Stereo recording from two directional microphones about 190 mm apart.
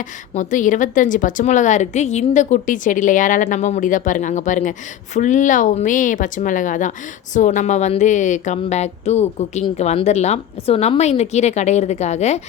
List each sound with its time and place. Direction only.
0.0 s a woman's voice: 40° left (ahead or behind)